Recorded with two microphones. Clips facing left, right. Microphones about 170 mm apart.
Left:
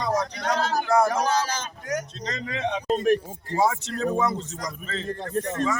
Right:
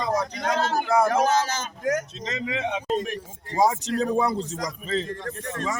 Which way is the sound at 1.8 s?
90° right.